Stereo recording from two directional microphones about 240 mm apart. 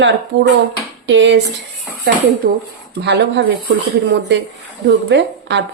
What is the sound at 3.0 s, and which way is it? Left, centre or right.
Speech, right.